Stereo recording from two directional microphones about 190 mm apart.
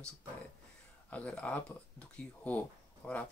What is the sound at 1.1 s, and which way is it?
Speech, 5° left (ahead or behind).